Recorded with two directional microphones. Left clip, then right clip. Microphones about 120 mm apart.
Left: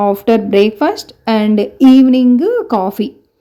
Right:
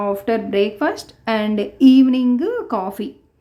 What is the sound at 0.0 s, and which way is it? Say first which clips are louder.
A woman's voice: left 8 dB; 40° left (ahead or behind).